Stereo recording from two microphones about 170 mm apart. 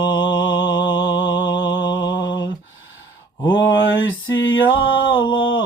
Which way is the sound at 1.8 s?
25° left (ahead or behind).